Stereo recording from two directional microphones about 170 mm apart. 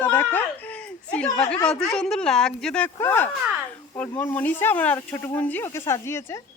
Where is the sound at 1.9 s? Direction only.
5° left (ahead or behind).